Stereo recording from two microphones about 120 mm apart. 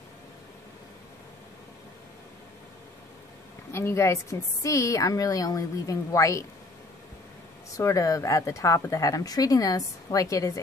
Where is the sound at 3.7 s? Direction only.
20° left (ahead or behind).